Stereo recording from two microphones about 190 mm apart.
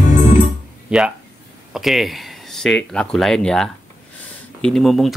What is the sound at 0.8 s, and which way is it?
Speech, 5° right (ahead or behind).